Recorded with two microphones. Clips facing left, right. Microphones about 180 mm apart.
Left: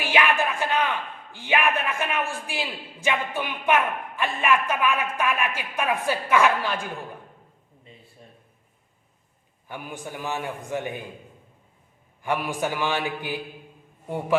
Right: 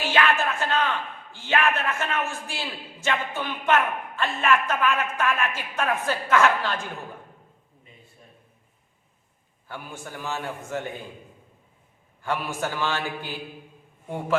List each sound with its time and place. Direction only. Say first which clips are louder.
0.0 s a man's voice: even; 10° left (ahead or behind)
9.6 s a man's voice: left 2 dB; 15° left (ahead or behind)
12.2 s a man's voice: left 2 dB; 15° left (ahead or behind)